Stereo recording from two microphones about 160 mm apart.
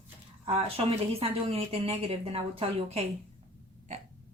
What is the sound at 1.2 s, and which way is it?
A woman's voice, 40° right (ahead or behind).